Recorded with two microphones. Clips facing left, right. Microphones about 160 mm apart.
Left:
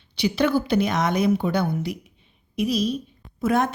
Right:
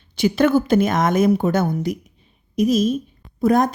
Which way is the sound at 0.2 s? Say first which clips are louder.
Right 5 dB; 50° right (ahead or behind).